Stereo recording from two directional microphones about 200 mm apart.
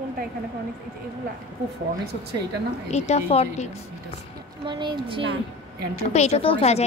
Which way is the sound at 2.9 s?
35° left (ahead or behind).